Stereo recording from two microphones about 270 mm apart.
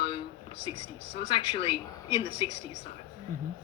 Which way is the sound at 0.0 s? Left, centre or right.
Centre.